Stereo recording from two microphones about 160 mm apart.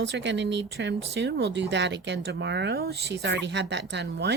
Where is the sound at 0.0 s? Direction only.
90° right.